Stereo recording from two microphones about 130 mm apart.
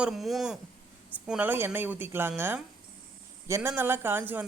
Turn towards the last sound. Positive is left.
turn(degrees=-15)  # may be behind; listen again after turning